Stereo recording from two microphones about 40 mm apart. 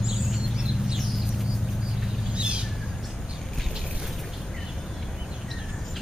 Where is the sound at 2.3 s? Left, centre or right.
Right.